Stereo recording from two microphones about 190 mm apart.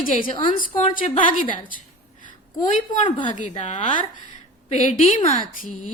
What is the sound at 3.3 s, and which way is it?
A woman's voice, 40° left (ahead or behind).